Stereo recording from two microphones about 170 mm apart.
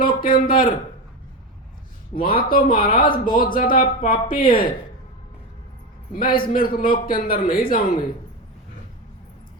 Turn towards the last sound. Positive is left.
turn(degrees=60)  # may be behind; listen again after turning